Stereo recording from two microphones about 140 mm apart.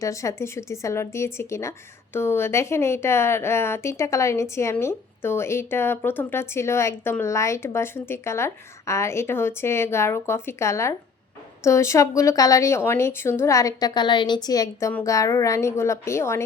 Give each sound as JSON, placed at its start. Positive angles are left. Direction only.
{"t": 0.0, "sound": "a woman's voice", "side_deg": 20}